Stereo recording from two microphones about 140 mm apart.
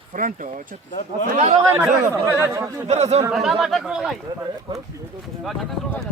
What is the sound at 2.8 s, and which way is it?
Speech, 50° right (ahead or behind).